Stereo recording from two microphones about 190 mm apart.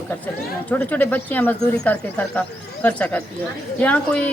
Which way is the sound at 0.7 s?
10° left (ahead or behind).